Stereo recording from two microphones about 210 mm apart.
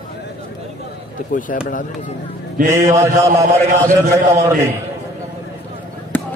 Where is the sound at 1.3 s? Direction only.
40° left (ahead or behind).